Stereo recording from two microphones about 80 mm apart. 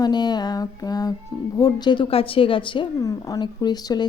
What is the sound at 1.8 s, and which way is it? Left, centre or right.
A woman's voice, left.